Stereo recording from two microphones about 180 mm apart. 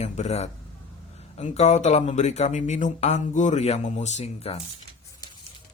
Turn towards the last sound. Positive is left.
turn(degrees=35)  # may be behind; listen again after turning